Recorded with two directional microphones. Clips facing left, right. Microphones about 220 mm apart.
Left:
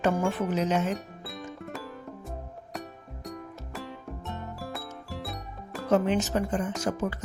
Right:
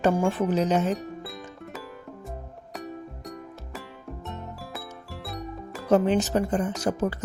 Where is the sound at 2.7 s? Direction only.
Centre (ahead or behind).